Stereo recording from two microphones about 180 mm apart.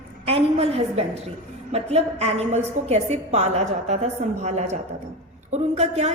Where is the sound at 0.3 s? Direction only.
35° right (ahead or behind).